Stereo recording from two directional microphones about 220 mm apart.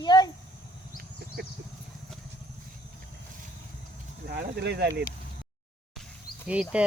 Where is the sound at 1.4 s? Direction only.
50° right (ahead or behind).